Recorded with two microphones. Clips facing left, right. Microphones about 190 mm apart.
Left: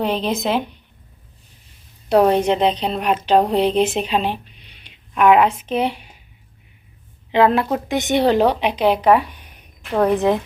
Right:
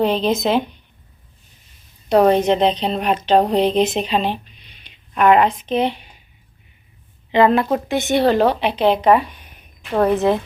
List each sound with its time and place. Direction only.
0.0 s speech: 10° left (ahead or behind)
2.0 s speech: 10° left (ahead or behind)
7.3 s speech: 5° left (ahead or behind)
7.9 s speech: 15° left (ahead or behind)